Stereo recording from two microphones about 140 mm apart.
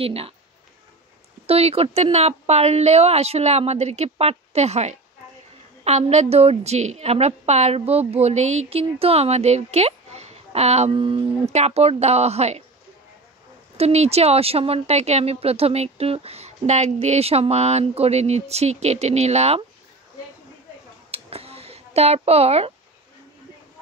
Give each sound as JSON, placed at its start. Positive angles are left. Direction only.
{"t": 0.0, "sound": "a woman's voice", "side_deg": -45}
{"t": 1.5, "sound": "a woman's voice", "side_deg": -45}
{"t": 13.7, "sound": "a woman's voice", "side_deg": -50}
{"t": 21.1, "sound": "a sound", "side_deg": -45}